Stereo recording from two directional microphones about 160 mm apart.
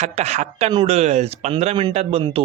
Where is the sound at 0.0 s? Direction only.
45° right (ahead or behind).